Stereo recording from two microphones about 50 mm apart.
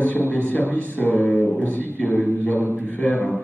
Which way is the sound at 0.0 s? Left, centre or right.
Left.